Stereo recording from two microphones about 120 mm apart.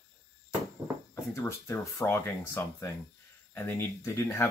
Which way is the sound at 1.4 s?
20° left (ahead or behind).